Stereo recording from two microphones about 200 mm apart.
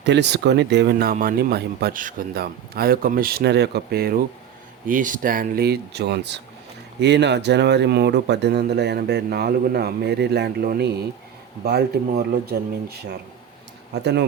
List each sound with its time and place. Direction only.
0.0 s speech: 60° right (ahead or behind)